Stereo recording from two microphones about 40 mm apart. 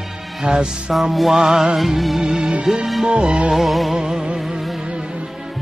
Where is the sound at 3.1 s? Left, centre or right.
Right.